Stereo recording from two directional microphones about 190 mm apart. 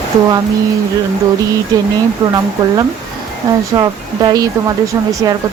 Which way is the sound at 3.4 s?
15° right (ahead or behind).